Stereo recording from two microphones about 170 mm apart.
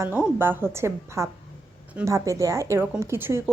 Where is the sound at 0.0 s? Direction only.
10° right (ahead or behind).